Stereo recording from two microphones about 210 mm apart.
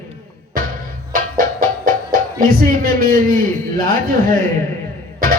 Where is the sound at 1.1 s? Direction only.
40° right (ahead or behind).